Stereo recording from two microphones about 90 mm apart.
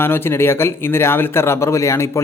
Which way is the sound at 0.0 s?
25° left (ahead or behind).